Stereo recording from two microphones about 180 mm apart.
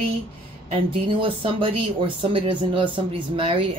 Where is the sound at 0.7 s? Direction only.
30° right (ahead or behind).